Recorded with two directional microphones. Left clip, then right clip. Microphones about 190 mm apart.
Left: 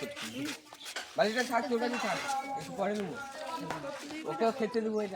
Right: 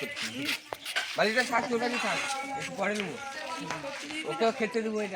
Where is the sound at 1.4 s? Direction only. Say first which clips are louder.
Right 3 dB; 5° right (ahead or behind).